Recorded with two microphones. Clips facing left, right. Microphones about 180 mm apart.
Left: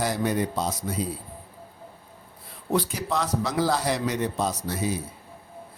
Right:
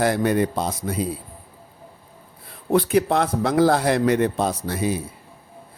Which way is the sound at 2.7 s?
55° right (ahead or behind).